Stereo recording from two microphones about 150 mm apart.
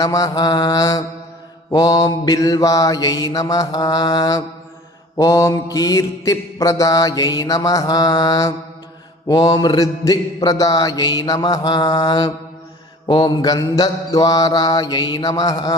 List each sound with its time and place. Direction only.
0.0 s mantra: 25° left (ahead or behind)